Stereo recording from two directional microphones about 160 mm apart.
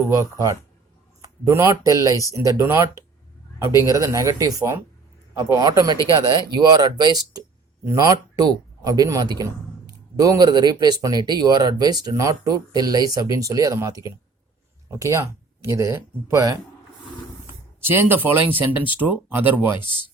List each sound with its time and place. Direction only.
0.1 s speech: 20° right (ahead or behind)
3.7 s speech: 20° left (ahead or behind)
3.9 s speech: 20° right (ahead or behind)
17.4 s a sound: 15° right (ahead or behind)
18.5 s speech: 10° right (ahead or behind)